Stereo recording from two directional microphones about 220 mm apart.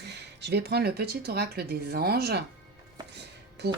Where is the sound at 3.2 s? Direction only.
50° right (ahead or behind).